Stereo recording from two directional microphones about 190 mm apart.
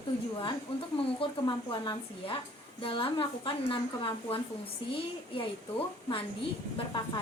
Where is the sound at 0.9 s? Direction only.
25° left (ahead or behind).